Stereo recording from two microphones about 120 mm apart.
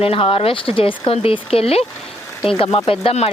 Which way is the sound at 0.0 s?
50° left (ahead or behind).